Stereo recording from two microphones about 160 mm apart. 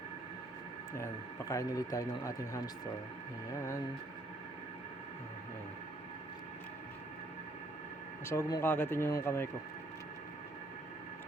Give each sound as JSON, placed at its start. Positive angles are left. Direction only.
{"t": 0.9, "sound": "speech", "side_deg": 20}
{"t": 8.2, "sound": "speech", "side_deg": 15}